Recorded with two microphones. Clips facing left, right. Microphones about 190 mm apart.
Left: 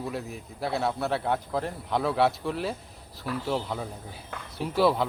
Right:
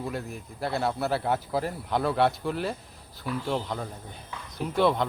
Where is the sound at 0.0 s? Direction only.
Centre (ahead or behind).